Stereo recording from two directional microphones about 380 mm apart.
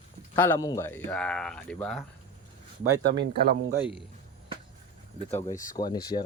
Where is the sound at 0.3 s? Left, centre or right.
Centre.